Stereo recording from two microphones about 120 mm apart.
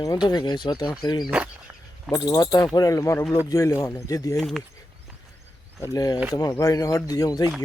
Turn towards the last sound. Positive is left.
turn(degrees=30)  # may be behind; listen again after turning